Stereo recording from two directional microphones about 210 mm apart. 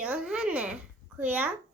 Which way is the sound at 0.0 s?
5° right (ahead or behind).